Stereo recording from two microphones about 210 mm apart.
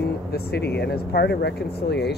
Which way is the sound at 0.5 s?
50° left (ahead or behind).